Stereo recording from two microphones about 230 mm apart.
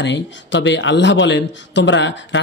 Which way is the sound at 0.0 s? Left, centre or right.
Left.